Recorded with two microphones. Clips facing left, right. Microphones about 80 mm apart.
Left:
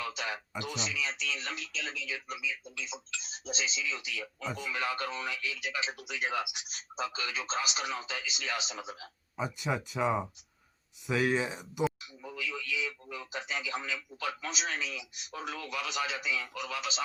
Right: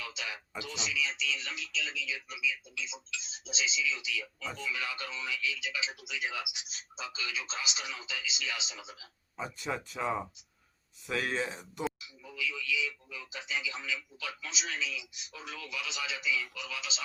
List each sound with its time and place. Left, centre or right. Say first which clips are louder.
0.0 s a sound: left 5 dB; left
0.6 s speech: right 1 dB; left
9.4 s speech: left 3 dB; centre
12.2 s speech: even; left